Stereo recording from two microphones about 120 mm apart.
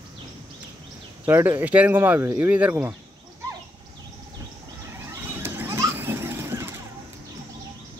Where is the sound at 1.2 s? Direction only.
20° right (ahead or behind).